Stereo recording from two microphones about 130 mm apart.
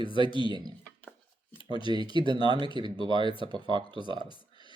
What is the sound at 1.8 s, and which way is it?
Speech, 35° right (ahead or behind).